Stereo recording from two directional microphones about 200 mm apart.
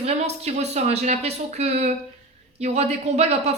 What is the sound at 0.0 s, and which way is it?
Speech, 35° right (ahead or behind).